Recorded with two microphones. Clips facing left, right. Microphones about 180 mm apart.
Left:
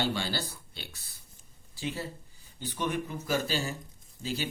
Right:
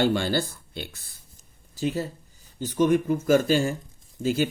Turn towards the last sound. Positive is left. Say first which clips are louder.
# right 10 dB
turn(degrees=-50)  # may be behind; listen again after turning